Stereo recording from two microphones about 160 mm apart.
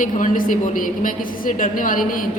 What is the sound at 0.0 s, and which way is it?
A woman's voice, 55° left (ahead or behind).